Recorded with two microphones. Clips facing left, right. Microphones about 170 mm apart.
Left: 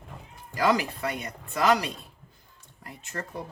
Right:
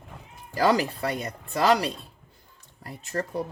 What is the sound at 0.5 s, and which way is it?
Speech, 35° right (ahead or behind).